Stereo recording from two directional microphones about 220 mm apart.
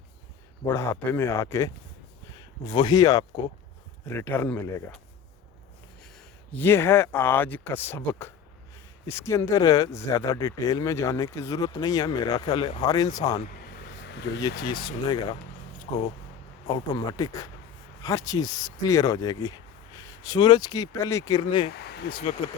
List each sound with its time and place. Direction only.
0.6 s speech: 15° left (ahead or behind)
6.5 s speech: 10° left (ahead or behind)
14.1 s speech: 50° left (ahead or behind)
14.8 s speech: 20° left (ahead or behind)
21.7 s speech: 45° left (ahead or behind)